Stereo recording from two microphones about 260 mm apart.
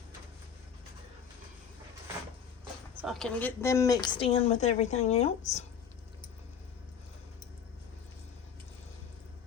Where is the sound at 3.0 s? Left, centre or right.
Centre; by 5.6 s left.